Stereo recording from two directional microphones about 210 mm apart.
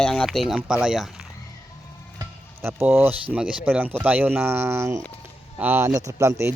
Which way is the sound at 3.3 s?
5° right (ahead or behind).